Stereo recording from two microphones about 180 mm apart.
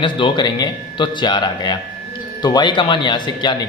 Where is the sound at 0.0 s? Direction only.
25° left (ahead or behind).